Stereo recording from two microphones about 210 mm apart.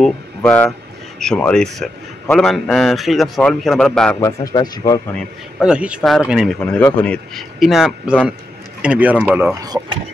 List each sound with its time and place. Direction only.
0.0 s a man's voice: 5° left (ahead or behind)
4.5 s speech: 15° left (ahead or behind)
5.1 s a man's voice: 5° right (ahead or behind)